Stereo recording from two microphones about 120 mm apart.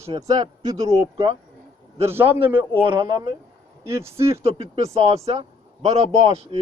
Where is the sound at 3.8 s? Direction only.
20° right (ahead or behind).